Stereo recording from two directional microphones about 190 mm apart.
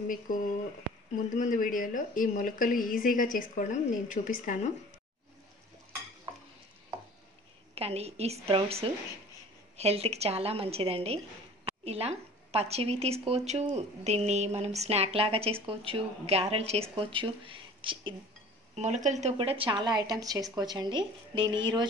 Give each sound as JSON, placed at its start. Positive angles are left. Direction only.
{"t": 1.3, "sound": "speech", "side_deg": 45}
{"t": 6.3, "sound": "stir", "side_deg": -25}
{"t": 7.7, "sound": "a woman's voice", "side_deg": -35}
{"t": 18.8, "sound": "a woman's voice", "side_deg": -40}